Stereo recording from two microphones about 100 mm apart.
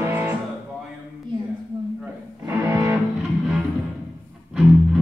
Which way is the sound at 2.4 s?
25° right (ahead or behind).